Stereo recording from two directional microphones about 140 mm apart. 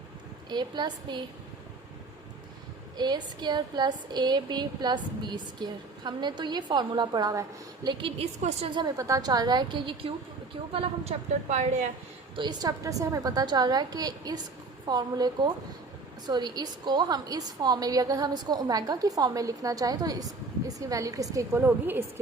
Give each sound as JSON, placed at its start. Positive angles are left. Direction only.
{"t": 0.5, "sound": "speech", "side_deg": -30}
{"t": 3.0, "sound": "a woman's voice", "side_deg": -30}
{"t": 8.2, "sound": "a woman's voice", "side_deg": -50}
{"t": 8.7, "sound": "speech", "side_deg": -30}
{"t": 10.8, "sound": "a woman's voice", "side_deg": -50}
{"t": 12.4, "sound": "a woman's voice", "side_deg": -30}